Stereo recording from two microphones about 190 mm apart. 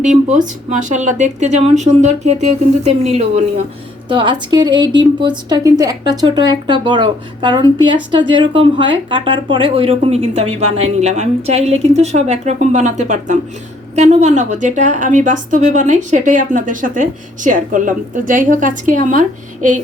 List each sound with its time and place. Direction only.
0.3 s a woman's voice: 40° right (ahead or behind)
4.1 s a woman's voice: 25° right (ahead or behind); by 19.2 s 40° right (ahead or behind)